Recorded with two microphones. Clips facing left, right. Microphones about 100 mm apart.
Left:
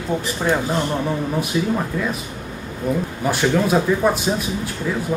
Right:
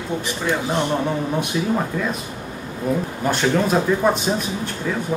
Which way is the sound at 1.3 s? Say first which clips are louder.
Even; 5° right (ahead or behind).